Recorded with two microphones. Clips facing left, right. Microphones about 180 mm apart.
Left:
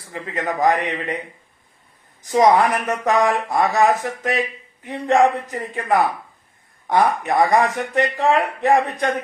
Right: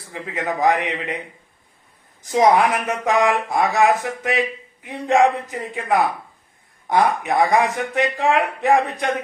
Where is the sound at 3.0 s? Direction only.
5° right (ahead or behind).